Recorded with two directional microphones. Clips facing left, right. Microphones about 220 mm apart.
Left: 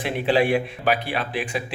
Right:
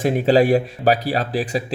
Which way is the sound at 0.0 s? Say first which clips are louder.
Right 5 dB; 40° right (ahead or behind).